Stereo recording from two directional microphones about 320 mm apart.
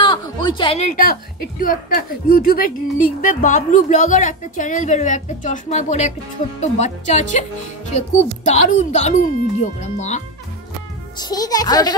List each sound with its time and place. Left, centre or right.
0.0 s a woman's voice: centre